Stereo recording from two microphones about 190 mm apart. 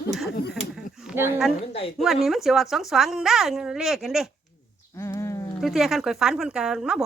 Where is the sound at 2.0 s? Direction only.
Centre (ahead or behind).